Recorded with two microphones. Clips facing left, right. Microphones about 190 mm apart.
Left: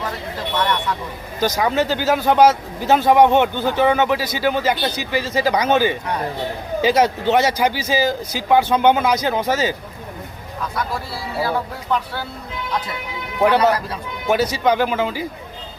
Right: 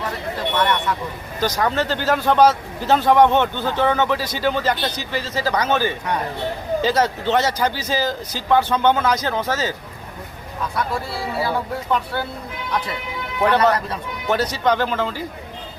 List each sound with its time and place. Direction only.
1.4 s speech: 5° left (ahead or behind)
11.3 s speech: centre (ahead or behind)
13.4 s speech: 10° left (ahead or behind)